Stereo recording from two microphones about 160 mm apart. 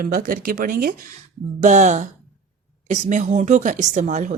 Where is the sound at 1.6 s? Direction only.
50° right (ahead or behind).